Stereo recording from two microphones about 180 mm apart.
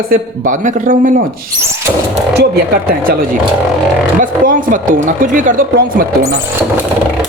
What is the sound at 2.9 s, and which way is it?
Speech, 55° right (ahead or behind).